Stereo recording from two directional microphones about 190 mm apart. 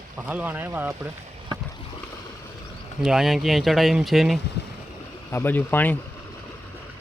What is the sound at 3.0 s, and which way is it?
Speech, centre (ahead or behind).